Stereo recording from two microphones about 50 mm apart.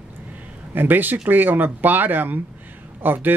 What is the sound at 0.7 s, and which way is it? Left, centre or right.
Speech, right.